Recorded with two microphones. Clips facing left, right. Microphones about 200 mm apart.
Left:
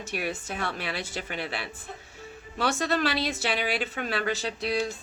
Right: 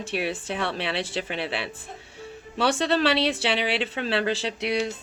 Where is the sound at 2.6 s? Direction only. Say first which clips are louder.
Right 4 dB; 30° right (ahead or behind).